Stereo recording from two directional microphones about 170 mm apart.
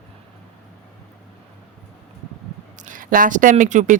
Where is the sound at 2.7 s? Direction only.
50° right (ahead or behind).